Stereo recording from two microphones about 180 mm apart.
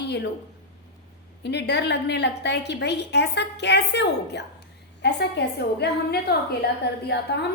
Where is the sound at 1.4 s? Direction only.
70° left (ahead or behind).